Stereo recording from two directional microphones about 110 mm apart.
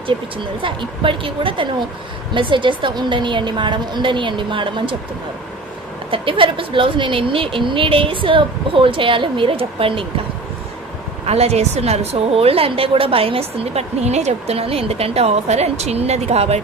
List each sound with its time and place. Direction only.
0.0 s speech: 50° right (ahead or behind)
6.0 s speech: 55° right (ahead or behind)
11.2 s a woman's voice: 70° right (ahead or behind)